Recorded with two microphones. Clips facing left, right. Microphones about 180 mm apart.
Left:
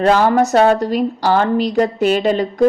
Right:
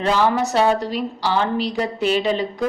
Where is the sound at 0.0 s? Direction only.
45° left (ahead or behind).